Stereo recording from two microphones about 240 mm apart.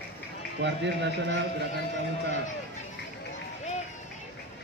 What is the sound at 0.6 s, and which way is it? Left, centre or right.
Speech, right.